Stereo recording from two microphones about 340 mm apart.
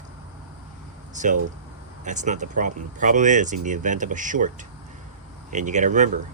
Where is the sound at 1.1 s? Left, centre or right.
Right.